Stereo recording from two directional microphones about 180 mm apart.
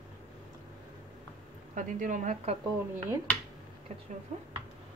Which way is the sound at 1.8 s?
45° right (ahead or behind).